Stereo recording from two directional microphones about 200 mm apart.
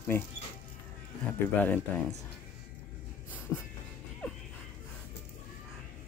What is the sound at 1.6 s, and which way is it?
Speech, 10° left (ahead or behind).